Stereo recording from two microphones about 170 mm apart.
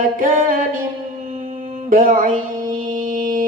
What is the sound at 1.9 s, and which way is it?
Mantra, 55° right (ahead or behind).